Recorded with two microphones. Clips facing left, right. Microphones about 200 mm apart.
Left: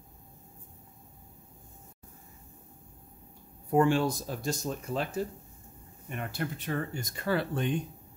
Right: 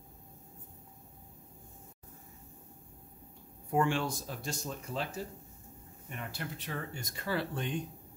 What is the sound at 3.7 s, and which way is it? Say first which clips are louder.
Speech: left 6 dB; 40° left (ahead or behind).